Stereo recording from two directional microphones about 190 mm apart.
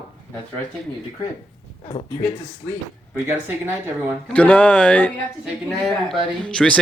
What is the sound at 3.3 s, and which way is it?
Speech, 10° right (ahead or behind).